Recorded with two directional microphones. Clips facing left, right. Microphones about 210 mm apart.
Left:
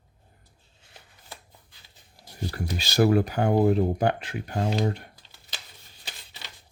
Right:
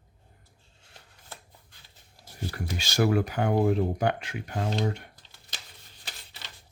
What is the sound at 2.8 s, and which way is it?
Speech, 35° left (ahead or behind).